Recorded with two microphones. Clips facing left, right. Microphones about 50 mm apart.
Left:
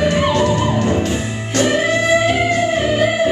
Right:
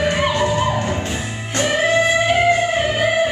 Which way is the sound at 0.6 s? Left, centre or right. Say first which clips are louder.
Left 2 dB; centre.